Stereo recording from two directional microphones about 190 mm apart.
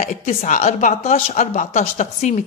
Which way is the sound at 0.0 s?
40° left (ahead or behind).